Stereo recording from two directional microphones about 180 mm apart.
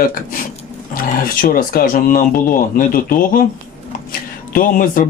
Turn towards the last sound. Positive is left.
turn(degrees=50)  # may be behind; listen again after turning